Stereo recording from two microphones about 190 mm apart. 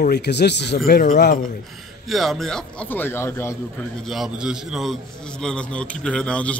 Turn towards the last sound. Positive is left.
turn(degrees=5)  # may be behind; listen again after turning